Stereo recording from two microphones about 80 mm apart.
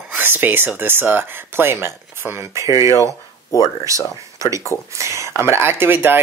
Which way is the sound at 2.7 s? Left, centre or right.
Left.